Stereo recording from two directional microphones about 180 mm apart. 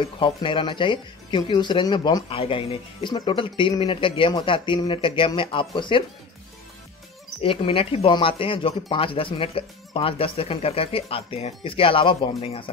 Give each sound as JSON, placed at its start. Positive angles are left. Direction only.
{"t": 0.0, "sound": "speech", "side_deg": 30}
{"t": 7.4, "sound": "speech", "side_deg": 30}